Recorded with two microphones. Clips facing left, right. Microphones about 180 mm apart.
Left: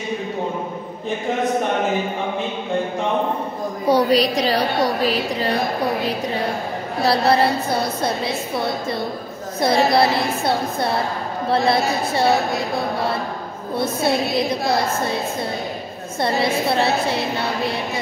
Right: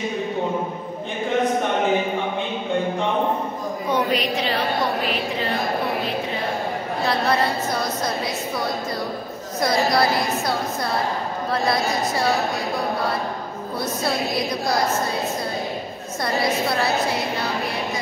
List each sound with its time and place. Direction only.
3.9 s a woman's voice: 35° left (ahead or behind)
7.0 s a woman's voice: 35° left (ahead or behind)
9.6 s a woman's voice: 25° left (ahead or behind)
13.7 s a woman's voice: 25° left (ahead or behind)
16.2 s a woman's voice: 25° left (ahead or behind)